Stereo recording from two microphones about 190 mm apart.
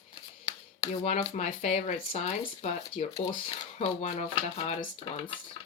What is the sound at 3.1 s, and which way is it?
Speech, 25° left (ahead or behind).